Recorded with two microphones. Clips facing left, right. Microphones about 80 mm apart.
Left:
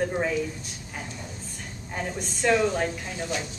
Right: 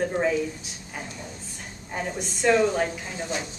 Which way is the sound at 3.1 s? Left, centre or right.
Right.